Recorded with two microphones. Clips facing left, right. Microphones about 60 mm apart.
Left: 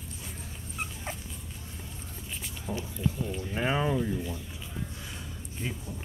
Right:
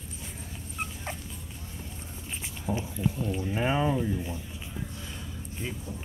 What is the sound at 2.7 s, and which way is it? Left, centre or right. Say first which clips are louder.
Speech: right 2 dB; centre.